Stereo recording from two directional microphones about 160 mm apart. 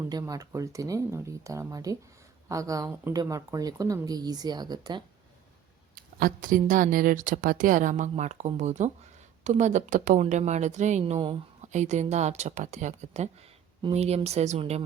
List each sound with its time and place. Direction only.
0.1 s speech: 20° right (ahead or behind)
5.9 s a woman's voice: 65° right (ahead or behind); by 14.8 s 45° right (ahead or behind)